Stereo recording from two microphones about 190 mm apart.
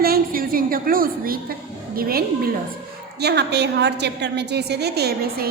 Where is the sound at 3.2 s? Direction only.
60° right (ahead or behind).